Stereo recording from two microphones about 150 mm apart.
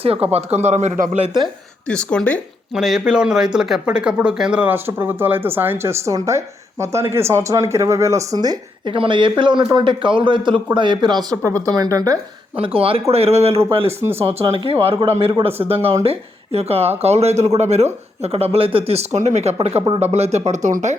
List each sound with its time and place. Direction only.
0.0 s a man's voice: 40° right (ahead or behind); by 1.2 s 55° right (ahead or behind)
1.9 s speech: 5° left (ahead or behind)
2.7 s speech: 5° right (ahead or behind); by 12.2 s 25° right (ahead or behind)
12.5 s speech: 40° right (ahead or behind)
14.0 s speech: 15° right (ahead or behind)
14.5 s a man's voice: 35° right (ahead or behind); by 20.9 s 55° right (ahead or behind)